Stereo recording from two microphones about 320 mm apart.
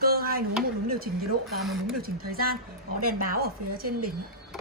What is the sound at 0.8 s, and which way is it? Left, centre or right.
Speech, right.